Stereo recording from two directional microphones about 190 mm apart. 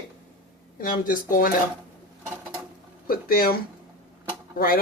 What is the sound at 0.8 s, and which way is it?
Speech, 45° left (ahead or behind).